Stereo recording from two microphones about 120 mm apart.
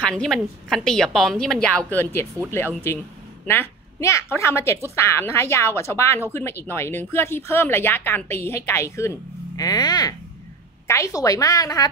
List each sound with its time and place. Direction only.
0.0 s a woman's voice: 5° left (ahead or behind); by 11.9 s 30° left (ahead or behind)